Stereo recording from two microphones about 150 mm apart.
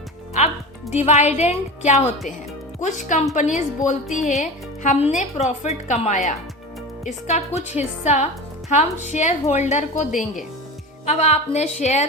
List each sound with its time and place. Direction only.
0.3 s speech: 50° left (ahead or behind)